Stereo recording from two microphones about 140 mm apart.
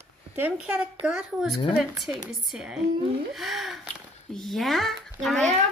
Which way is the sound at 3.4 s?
Centre (ahead or behind).